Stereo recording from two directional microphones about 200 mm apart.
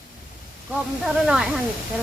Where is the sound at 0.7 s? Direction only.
5° right (ahead or behind).